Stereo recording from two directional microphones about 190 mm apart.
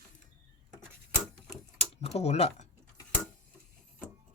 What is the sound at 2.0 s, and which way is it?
Speech, 35° left (ahead or behind).